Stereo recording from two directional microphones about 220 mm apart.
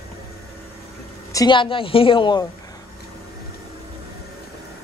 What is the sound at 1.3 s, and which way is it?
A woman's voice, 20° left (ahead or behind).